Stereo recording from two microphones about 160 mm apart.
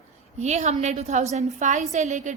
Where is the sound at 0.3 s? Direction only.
45° right (ahead or behind).